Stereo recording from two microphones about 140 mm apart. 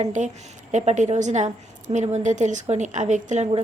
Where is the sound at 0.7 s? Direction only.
55° right (ahead or behind).